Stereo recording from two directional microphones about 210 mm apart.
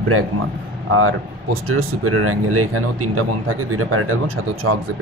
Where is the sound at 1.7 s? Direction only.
85° right.